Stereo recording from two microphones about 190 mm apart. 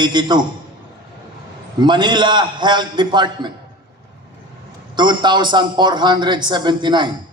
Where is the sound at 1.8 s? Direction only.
25° right (ahead or behind).